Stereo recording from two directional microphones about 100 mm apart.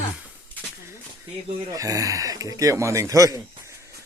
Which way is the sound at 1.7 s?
35° right (ahead or behind).